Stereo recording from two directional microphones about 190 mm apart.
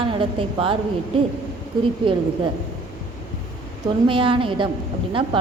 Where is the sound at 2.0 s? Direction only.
25° right (ahead or behind).